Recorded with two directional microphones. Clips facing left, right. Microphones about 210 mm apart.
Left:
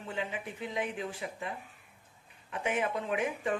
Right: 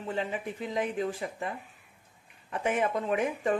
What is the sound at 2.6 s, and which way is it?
Speech, 40° right (ahead or behind).